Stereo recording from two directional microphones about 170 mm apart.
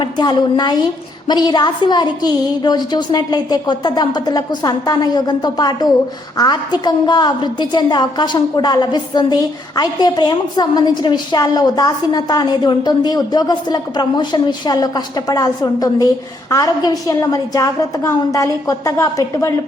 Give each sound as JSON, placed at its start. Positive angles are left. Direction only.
{"t": 0.0, "sound": "a woman's voice", "side_deg": 25}